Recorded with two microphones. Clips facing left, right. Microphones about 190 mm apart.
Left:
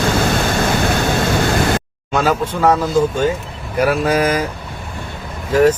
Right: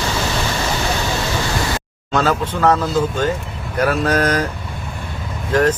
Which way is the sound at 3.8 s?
10° left (ahead or behind).